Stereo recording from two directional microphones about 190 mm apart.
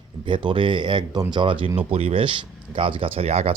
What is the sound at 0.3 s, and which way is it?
Speech, 25° right (ahead or behind).